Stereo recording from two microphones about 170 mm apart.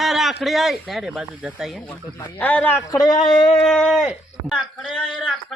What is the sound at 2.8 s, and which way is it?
Speech, 20° left (ahead or behind).